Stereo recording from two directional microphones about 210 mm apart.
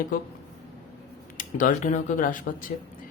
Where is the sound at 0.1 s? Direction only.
45° left (ahead or behind).